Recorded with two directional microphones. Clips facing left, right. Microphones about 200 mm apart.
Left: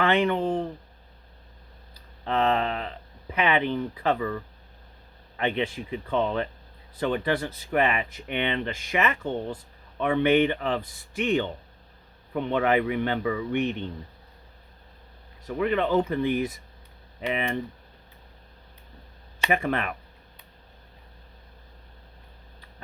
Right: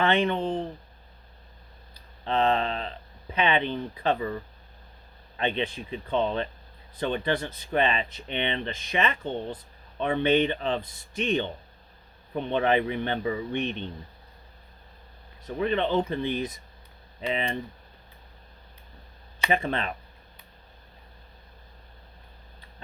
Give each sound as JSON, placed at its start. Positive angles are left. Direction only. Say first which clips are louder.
{"t": 0.0, "sound": "speech", "louder": "left 1 dB", "side_deg": -20}
{"t": 1.9, "sound": "a sound", "louder": "even", "side_deg": -20}
{"t": 3.4, "sound": "speech", "louder": "left 1 dB", "side_deg": -20}
{"t": 15.4, "sound": "speech", "louder": "left 1 dB", "side_deg": -25}
{"t": 19.5, "sound": "speech", "louder": "left 1 dB", "side_deg": -20}